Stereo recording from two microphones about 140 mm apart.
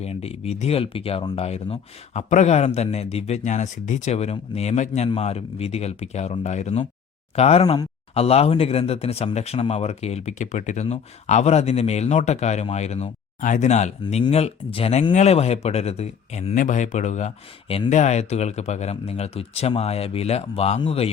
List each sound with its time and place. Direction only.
0.0 s speech: 45° left (ahead or behind)
16.6 s speech: 60° left (ahead or behind); by 21.1 s 45° left (ahead or behind)